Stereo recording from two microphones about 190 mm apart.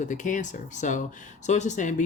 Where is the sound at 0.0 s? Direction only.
40° left (ahead or behind).